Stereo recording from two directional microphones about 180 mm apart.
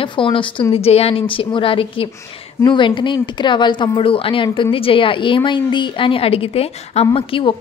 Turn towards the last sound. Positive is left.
turn(degrees=30)  # may be behind; listen again after turning